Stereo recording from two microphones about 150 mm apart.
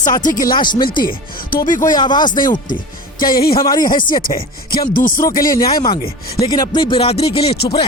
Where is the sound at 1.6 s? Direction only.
60° left (ahead or behind).